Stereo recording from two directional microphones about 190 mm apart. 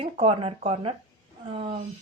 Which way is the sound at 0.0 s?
30° right (ahead or behind).